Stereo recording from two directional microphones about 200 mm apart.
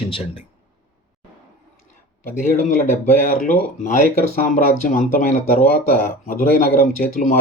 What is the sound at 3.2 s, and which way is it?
Speech, 45° left (ahead or behind).